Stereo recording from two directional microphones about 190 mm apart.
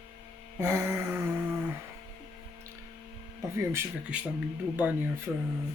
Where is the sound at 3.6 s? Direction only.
15° right (ahead or behind).